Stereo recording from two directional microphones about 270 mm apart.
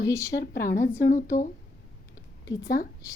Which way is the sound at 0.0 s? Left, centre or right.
Centre.